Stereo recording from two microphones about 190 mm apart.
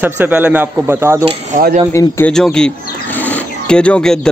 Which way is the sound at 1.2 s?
40° right (ahead or behind).